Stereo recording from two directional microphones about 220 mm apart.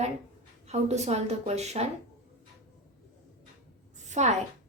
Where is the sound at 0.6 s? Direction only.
30° right (ahead or behind).